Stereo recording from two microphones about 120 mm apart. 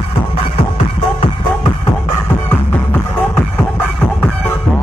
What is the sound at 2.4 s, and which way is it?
Music, 15° left (ahead or behind).